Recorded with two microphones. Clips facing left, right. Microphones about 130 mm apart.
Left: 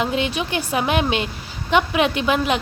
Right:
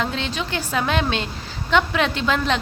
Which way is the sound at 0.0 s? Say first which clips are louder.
Left 4 dB; 15° left (ahead or behind).